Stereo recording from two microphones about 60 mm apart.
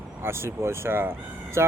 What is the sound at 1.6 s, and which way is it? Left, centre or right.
Speech, right.